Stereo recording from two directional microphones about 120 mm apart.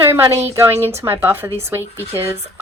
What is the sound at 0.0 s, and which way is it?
Speech, 20° right (ahead or behind).